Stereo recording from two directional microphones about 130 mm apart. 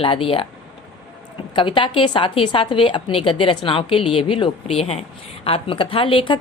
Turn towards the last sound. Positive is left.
turn(degrees=40)  # may be behind; listen again after turning